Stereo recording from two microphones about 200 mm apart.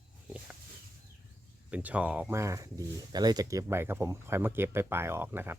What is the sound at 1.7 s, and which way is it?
Speech, 5° right (ahead or behind).